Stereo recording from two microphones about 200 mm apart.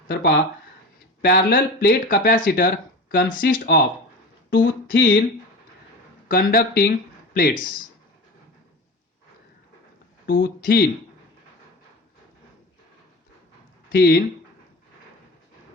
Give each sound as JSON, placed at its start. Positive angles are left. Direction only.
{"t": 0.1, "sound": "speech", "side_deg": 55}
{"t": 4.4, "sound": "a sound", "side_deg": 45}
{"t": 6.2, "sound": "speech", "side_deg": 45}
{"t": 10.2, "sound": "speech", "side_deg": 45}
{"t": 13.9, "sound": "speech", "side_deg": 50}